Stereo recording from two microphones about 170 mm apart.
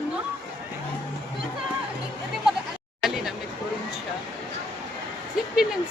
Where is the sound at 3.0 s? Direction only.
Centre (ahead or behind).